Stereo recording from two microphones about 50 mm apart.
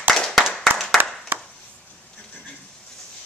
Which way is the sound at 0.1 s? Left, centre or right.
Centre.